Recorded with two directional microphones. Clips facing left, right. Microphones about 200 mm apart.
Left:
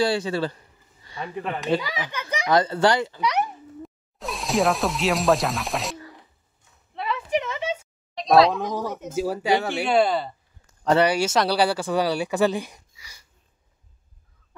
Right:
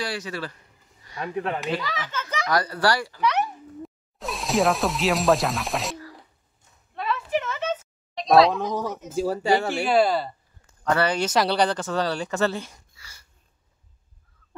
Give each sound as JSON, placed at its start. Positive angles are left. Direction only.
{"t": 0.0, "sound": "a child's voice", "side_deg": 30}
{"t": 1.2, "sound": "speech", "side_deg": 0}
{"t": 1.8, "sound": "a child's voice", "side_deg": 15}
{"t": 3.8, "sound": "speech", "side_deg": 0}
{"t": 7.0, "sound": "a sound", "side_deg": 15}
{"t": 8.3, "sound": "speech", "side_deg": 0}
{"t": 11.0, "sound": "speech", "side_deg": 10}